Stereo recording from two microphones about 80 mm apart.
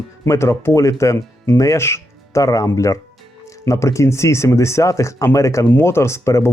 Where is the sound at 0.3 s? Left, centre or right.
Left.